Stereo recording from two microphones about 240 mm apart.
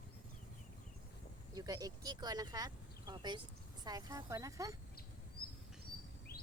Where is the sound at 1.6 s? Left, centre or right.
Centre.